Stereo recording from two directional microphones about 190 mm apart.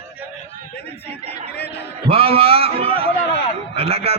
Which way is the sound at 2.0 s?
30° right (ahead or behind).